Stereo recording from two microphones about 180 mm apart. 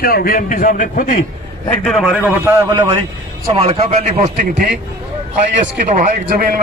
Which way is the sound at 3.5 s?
35° right (ahead or behind).